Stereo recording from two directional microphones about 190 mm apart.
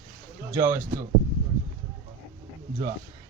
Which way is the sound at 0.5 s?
10° right (ahead or behind).